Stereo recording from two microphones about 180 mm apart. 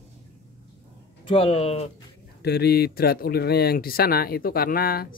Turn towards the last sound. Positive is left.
turn(degrees=55)  # may be behind; listen again after turning